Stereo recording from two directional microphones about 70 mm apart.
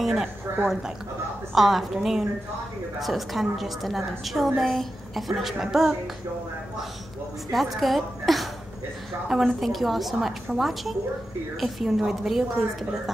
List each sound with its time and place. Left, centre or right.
0.0 s a woman's voice: centre
0.5 s a woman's voice: right
1.5 s a woman's voice: centre
7.5 s a woman's voice: centre